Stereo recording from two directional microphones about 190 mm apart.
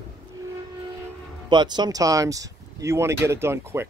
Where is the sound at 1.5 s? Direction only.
25° right (ahead or behind).